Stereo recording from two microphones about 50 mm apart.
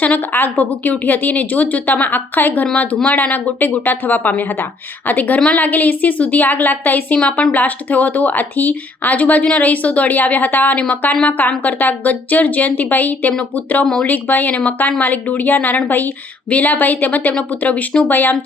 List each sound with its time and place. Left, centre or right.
0.0 s speech: left
7.2 s speech: left
7.5 s speech: left
10.8 s speech: left